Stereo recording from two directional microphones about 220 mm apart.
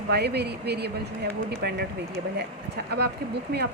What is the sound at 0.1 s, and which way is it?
Speech, 50° right (ahead or behind).